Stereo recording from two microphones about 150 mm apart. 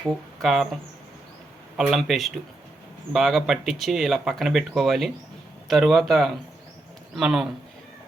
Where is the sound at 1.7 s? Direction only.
Centre (ahead or behind).